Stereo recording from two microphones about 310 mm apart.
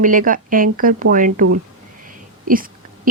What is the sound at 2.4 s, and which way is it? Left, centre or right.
Speech, right.